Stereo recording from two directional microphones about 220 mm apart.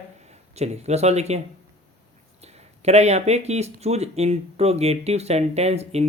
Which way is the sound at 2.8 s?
30° right (ahead or behind).